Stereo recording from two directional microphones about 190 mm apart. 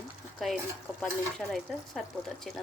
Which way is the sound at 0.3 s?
5° right (ahead or behind).